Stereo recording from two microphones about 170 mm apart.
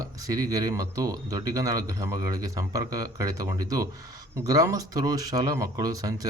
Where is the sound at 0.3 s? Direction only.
20° right (ahead or behind).